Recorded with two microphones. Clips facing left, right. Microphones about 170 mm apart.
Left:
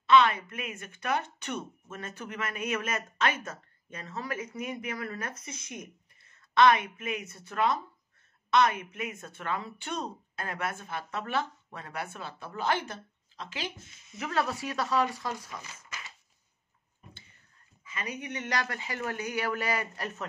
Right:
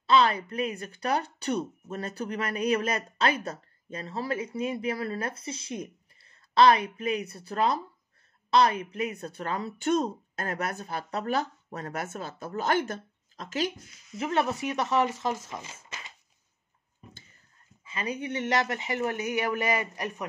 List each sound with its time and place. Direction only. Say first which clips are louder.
0.0 s speech: even; 35° right (ahead or behind)
13.7 s speech: right 2 dB; 25° left (ahead or behind)
14.1 s speech: right 3 dB; 25° right (ahead or behind)
17.8 s speech: right 5 dB; 30° right (ahead or behind)